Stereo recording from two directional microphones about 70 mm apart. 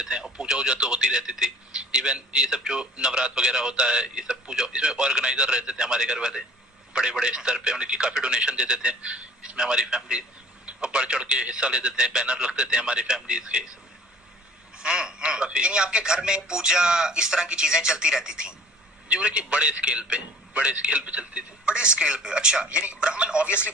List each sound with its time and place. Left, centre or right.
0.0 s a man's voice: centre
14.8 s a man's voice: centre